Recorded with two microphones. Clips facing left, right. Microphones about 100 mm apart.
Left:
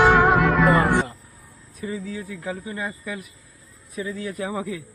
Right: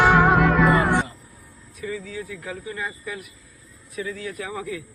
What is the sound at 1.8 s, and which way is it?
Speech, 30° left (ahead or behind).